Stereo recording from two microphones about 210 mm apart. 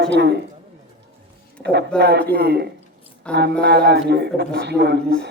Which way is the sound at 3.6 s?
50° right (ahead or behind).